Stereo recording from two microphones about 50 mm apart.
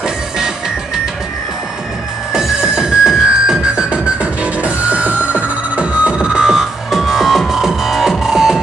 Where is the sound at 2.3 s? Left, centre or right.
Centre.